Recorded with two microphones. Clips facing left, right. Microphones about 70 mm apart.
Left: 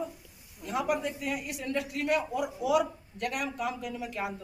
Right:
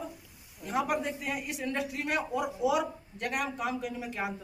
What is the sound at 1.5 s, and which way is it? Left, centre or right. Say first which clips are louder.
A man's voice: even; right.